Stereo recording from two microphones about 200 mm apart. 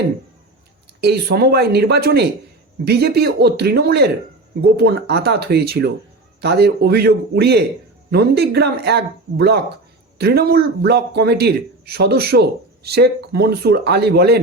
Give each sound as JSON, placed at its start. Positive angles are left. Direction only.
{"t": 1.0, "sound": "a man's voice", "side_deg": -55}